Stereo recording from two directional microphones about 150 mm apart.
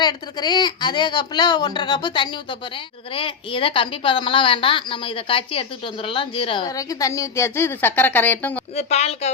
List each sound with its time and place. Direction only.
0.0 s a woman's voice: 30° left (ahead or behind)
6.7 s a woman's voice: 25° left (ahead or behind)
8.7 s a woman's voice: 45° left (ahead or behind)